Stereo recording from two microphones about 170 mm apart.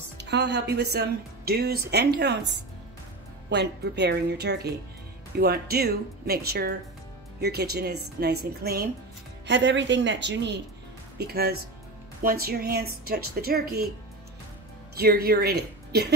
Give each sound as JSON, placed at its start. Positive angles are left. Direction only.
{"t": 0.2, "sound": "a woman's voice", "side_deg": -90}
{"t": 9.5, "sound": "speech", "side_deg": -90}
{"t": 11.1, "sound": "a woman's voice", "side_deg": -70}
{"t": 15.0, "sound": "speech", "side_deg": -65}